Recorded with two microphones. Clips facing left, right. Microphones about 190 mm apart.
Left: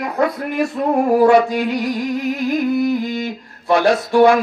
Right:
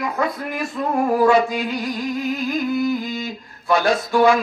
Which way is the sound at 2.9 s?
65° left (ahead or behind).